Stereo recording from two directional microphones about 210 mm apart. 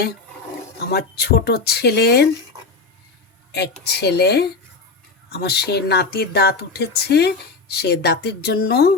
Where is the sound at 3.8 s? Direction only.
50° left (ahead or behind).